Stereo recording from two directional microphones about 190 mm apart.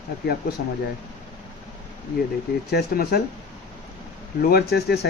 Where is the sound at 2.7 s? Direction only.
55° left (ahead or behind).